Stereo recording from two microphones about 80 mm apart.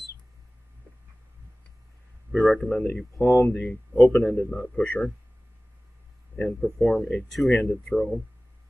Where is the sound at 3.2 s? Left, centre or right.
Left.